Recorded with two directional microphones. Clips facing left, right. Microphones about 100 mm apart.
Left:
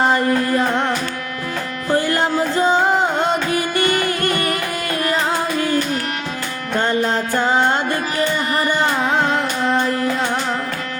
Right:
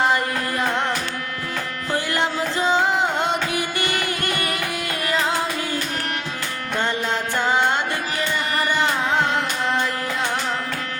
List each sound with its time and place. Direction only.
0.0 s music: 35° left (ahead or behind)
1.9 s music: 40° left (ahead or behind)
6.7 s music: 40° left (ahead or behind)